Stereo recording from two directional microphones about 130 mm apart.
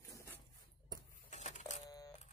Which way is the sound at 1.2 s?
65° left (ahead or behind).